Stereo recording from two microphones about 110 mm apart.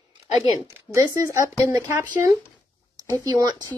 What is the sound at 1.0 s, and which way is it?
Speech, 30° right (ahead or behind).